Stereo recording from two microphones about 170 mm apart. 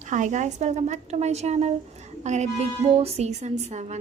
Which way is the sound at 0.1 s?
45° right (ahead or behind).